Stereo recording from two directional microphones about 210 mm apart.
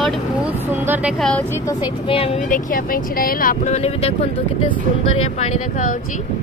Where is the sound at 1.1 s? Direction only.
5° left (ahead or behind).